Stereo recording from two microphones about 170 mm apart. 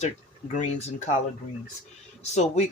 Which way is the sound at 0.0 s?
45° left (ahead or behind).